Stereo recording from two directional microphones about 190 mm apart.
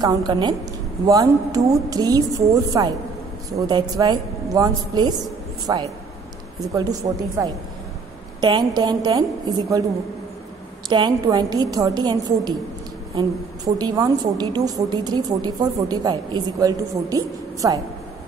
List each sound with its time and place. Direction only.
0.0 s a woman's voice: 20° right (ahead or behind)
10.9 s a woman's voice: 25° right (ahead or behind)